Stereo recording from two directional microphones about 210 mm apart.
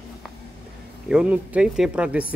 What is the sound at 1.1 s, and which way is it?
Speech, 5° right (ahead or behind).